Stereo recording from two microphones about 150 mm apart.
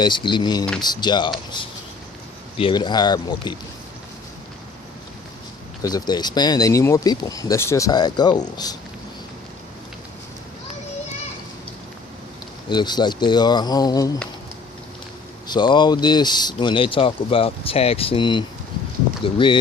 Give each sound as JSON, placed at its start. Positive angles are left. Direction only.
{"t": 0.0, "sound": "speech", "side_deg": 30}
{"t": 2.6, "sound": "speech", "side_deg": 35}
{"t": 5.8, "sound": "speech", "side_deg": 25}
{"t": 12.6, "sound": "speech", "side_deg": 30}
{"t": 15.4, "sound": "speech", "side_deg": 30}